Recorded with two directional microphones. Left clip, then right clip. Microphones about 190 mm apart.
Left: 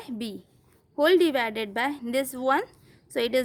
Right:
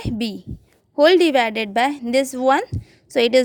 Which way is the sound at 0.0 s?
35° right (ahead or behind).